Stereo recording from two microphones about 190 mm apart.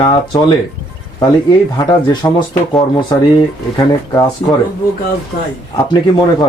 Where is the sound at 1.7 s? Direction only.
25° left (ahead or behind).